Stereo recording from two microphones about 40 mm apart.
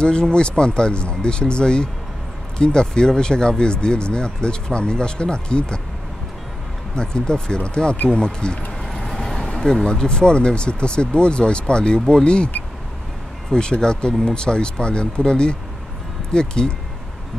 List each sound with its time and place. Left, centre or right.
0.0 s speech: left
7.0 s speech: left
8.8 s vehicle: centre
9.6 s speech: centre
9.8 s speech: left
13.5 s speech: centre